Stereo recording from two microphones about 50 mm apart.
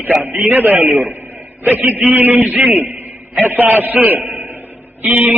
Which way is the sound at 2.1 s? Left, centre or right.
Right.